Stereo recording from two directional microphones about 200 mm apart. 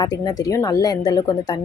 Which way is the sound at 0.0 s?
20° left (ahead or behind).